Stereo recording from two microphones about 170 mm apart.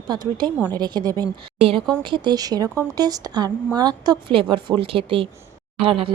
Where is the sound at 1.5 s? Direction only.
35° right (ahead or behind).